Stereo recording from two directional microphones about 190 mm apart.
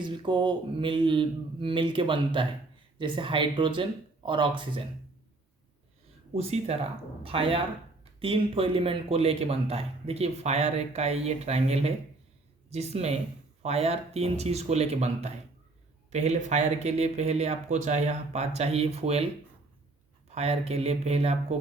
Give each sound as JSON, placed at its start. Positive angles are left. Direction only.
{"t": 0.0, "sound": "speech", "side_deg": -25}
{"t": 6.3, "sound": "speech", "side_deg": -30}
{"t": 20.3, "sound": "speech", "side_deg": -35}